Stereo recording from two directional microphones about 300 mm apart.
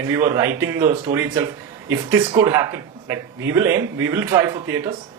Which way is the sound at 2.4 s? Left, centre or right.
Centre.